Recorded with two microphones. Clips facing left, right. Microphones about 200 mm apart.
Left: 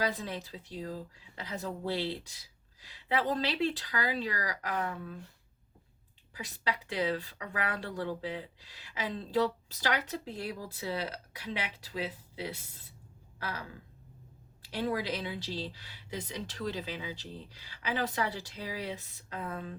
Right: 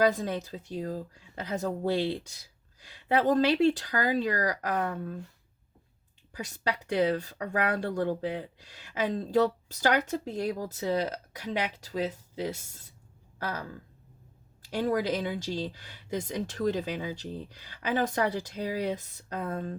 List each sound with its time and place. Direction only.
0.0 s speech: 45° right (ahead or behind)
6.3 s speech: 45° right (ahead or behind)